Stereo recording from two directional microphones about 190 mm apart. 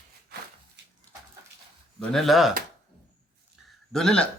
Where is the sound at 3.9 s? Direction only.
Centre (ahead or behind).